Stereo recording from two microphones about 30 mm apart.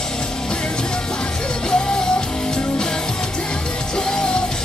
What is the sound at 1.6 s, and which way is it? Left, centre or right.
Music, left.